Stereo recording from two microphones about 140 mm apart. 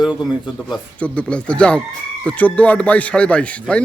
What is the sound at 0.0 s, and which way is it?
Speech, 5° right (ahead or behind).